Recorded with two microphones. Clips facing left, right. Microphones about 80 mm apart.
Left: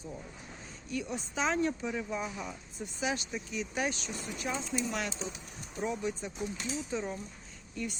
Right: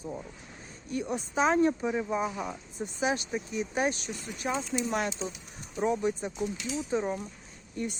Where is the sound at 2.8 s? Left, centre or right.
Right.